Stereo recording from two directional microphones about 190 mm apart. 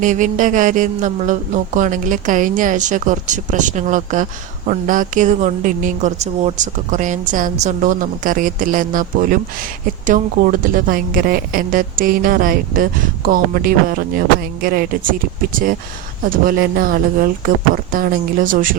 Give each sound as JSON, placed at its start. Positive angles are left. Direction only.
{"t": 0.0, "sound": "speech", "side_deg": -40}
{"t": 16.3, "sound": "speech", "side_deg": -50}